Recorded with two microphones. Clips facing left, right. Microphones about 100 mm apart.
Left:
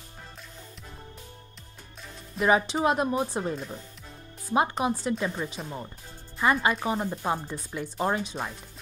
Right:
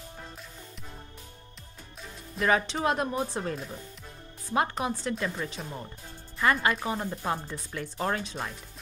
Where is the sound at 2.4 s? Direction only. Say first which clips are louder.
Left 3 dB; 10° left (ahead or behind).